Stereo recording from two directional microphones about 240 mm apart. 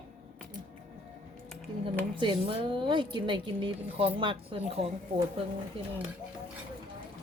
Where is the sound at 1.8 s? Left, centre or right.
Right.